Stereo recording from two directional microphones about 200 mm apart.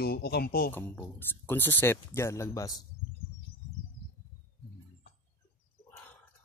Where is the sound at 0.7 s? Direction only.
10° left (ahead or behind).